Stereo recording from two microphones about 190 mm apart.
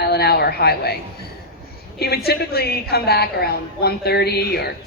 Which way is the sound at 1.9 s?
55° left (ahead or behind).